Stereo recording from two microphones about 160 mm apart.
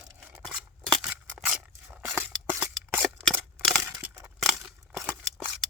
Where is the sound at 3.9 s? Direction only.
5° right (ahead or behind).